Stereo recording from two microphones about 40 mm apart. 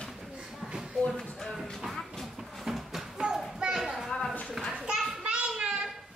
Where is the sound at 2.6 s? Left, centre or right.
Centre.